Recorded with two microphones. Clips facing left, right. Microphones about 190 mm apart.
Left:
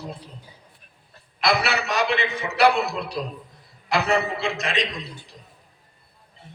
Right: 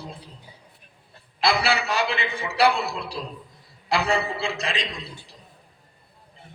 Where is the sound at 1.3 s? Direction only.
30° right (ahead or behind).